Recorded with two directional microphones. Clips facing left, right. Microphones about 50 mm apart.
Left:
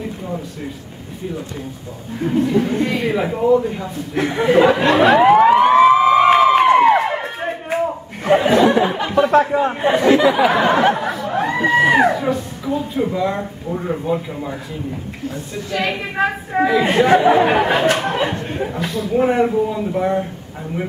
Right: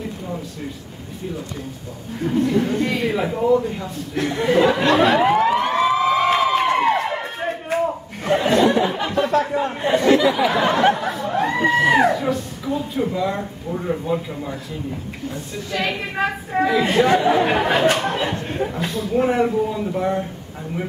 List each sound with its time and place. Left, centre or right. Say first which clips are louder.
2.2 s speech: left 2 dB; centre
4.1 s a sound: left 3 dB; centre
9.4 s speech: left 5 dB; centre
10.2 s speech: left 4 dB; left
11.1 s snicker: left 1 dB; centre
11.8 s speech: left 2 dB; centre
15.5 s speech: left 2 dB; centre